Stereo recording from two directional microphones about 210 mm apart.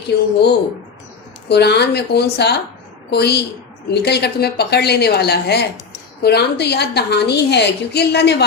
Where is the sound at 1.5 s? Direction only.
50° left (ahead or behind).